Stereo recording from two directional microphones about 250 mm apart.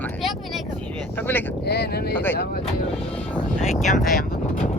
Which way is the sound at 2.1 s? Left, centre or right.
Centre.